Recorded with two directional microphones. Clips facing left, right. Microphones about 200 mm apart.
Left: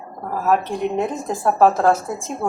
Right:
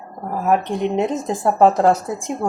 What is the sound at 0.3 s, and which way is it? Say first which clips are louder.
A woman's voice: right 1 dB; 15° right (ahead or behind).